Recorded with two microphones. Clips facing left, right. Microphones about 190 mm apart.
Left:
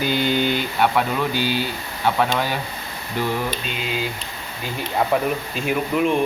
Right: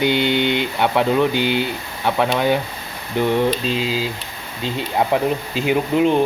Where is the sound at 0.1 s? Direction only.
75° right (ahead or behind).